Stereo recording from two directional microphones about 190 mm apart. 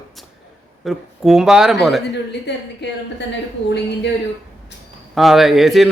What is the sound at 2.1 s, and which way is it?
Speech, 65° left (ahead or behind).